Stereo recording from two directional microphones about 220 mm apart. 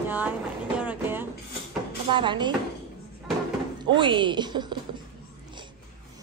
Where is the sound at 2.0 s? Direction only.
20° right (ahead or behind).